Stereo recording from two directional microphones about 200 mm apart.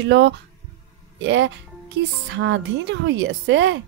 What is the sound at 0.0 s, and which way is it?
A woman's voice, 60° right (ahead or behind).